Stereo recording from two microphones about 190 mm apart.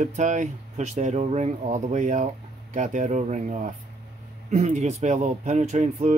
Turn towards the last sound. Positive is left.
turn(degrees=-35)  # may be behind; listen again after turning